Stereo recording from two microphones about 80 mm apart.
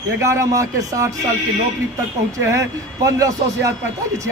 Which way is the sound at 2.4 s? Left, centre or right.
Right.